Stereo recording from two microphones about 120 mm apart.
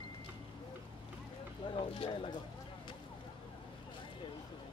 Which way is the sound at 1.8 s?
45° left (ahead or behind).